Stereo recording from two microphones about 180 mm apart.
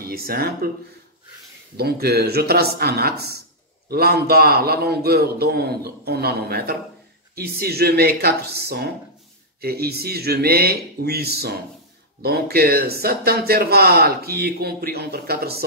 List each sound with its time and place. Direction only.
0.0 s speech: 60° right (ahead or behind)
1.8 s speech: 60° right (ahead or behind)